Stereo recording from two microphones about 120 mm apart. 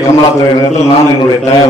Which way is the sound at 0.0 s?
25° left (ahead or behind).